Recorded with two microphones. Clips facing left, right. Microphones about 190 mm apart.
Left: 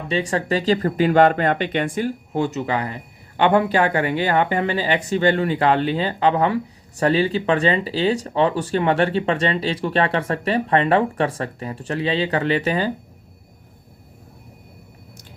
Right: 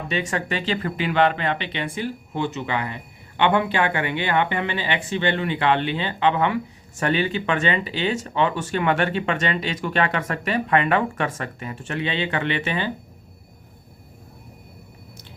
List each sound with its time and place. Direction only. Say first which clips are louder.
0.1 s speech: left 5 dB; 35° left (ahead or behind)